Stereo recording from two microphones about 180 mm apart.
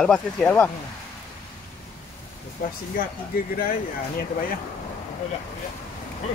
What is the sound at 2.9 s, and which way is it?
Speech, 55° left (ahead or behind).